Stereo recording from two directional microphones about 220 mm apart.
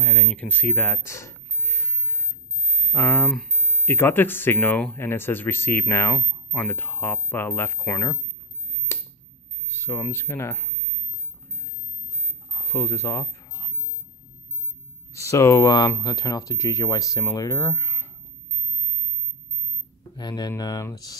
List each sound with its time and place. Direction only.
0.0 s a sound: centre (ahead or behind)
2.9 s speech: 10° left (ahead or behind)
9.7 s speech: 10° left (ahead or behind)
12.5 s speech: 10° left (ahead or behind)
15.1 s speech: 15° left (ahead or behind)
20.0 s speech: 20° left (ahead or behind)